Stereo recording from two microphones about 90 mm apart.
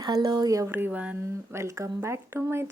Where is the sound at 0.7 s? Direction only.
20° right (ahead or behind).